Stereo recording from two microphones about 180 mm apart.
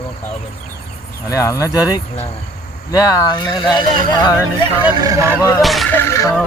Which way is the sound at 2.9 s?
20° left (ahead or behind).